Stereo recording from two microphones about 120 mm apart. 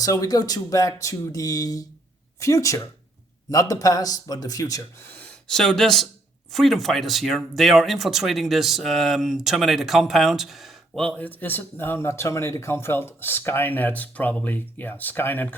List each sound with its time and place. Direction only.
0.0 s speech: 30° left (ahead or behind)
5.1 s speech: 5° left (ahead or behind)